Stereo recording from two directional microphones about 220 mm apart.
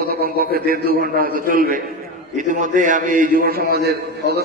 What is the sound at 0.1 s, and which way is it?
A man's voice, 45° right (ahead or behind).